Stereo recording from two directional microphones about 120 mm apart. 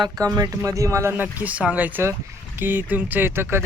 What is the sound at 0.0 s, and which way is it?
Speech, 30° right (ahead or behind).